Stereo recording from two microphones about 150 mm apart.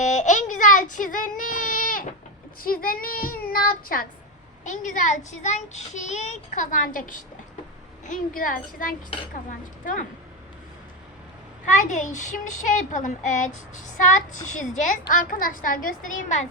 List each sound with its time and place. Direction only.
0.0 s child singing: 50° left (ahead or behind); by 4.0 s 70° left (ahead or behind)
4.6 s speech: 55° left (ahead or behind)
8.0 s child singing: 60° left (ahead or behind)
9.8 s speech: 60° left (ahead or behind)
11.6 s speech: 55° left (ahead or behind)
15.1 s speech: 65° left (ahead or behind)